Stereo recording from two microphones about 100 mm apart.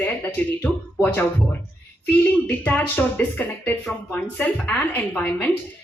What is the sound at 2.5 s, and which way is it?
A woman's voice, 15° left (ahead or behind).